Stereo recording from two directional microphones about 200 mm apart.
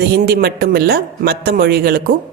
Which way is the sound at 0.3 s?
50° right (ahead or behind).